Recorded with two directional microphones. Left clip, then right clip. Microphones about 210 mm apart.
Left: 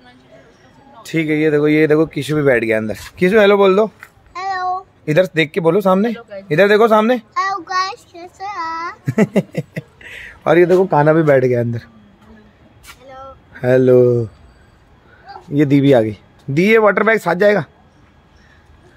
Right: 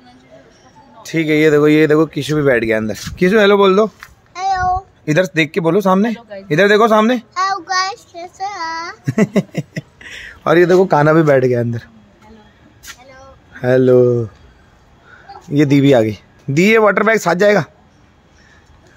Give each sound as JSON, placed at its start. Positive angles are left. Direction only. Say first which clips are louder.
{"t": 1.3, "sound": "speech", "louder": "right 4 dB", "side_deg": -45}
{"t": 1.6, "sound": "a man's voice", "louder": "right 2 dB", "side_deg": -25}
{"t": 2.0, "sound": "speech", "louder": "even", "side_deg": -5}
{"t": 6.5, "sound": "a sound", "louder": "even", "side_deg": -10}
{"t": 10.7, "sound": "a man's voice", "louder": "right 1 dB", "side_deg": -25}
{"t": 11.2, "sound": "speech", "louder": "even", "side_deg": -5}
{"t": 13.5, "sound": "speech", "louder": "even", "side_deg": 0}
{"t": 15.5, "sound": "speech", "louder": "right 1 dB", "side_deg": -10}